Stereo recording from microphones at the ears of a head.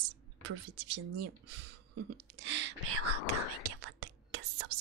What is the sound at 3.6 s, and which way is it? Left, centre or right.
Whispering, right.